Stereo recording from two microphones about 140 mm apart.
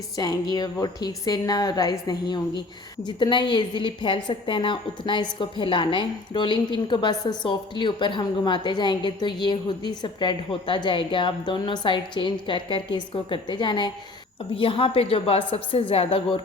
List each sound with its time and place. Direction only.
0.2 s a woman's voice: 30° left (ahead or behind)